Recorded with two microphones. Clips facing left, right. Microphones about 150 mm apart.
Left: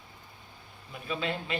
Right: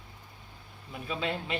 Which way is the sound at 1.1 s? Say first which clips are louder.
Even; 20° right (ahead or behind).